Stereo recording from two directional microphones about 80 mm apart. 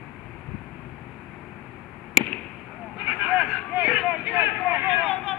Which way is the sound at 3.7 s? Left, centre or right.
Centre.